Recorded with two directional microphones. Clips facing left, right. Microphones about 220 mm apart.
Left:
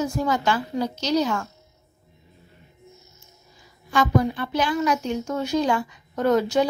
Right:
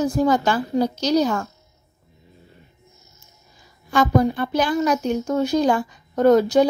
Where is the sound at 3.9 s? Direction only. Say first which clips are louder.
Right 3 dB; 40° right (ahead or behind).